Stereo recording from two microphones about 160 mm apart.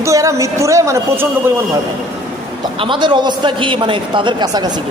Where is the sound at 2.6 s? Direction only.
30° right (ahead or behind).